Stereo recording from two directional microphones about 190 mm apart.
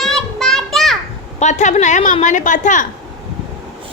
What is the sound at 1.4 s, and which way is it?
A woman's voice, 40° left (ahead or behind).